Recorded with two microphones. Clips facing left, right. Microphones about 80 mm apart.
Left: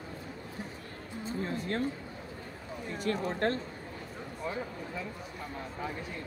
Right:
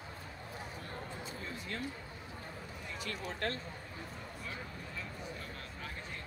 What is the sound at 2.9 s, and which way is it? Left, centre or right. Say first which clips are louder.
Speech: left 10 dB; left.